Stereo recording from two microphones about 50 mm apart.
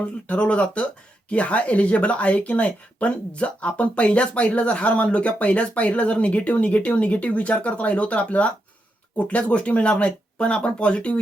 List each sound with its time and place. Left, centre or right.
0.0 s speech: left